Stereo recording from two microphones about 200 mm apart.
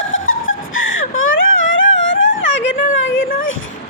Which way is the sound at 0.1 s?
80° left.